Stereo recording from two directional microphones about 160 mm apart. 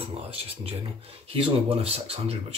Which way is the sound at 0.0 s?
40° right (ahead or behind).